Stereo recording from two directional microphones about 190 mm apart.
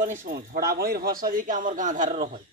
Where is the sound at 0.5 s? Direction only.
55° right (ahead or behind).